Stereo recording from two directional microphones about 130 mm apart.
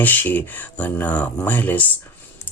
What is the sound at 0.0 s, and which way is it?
Speech, 15° left (ahead or behind).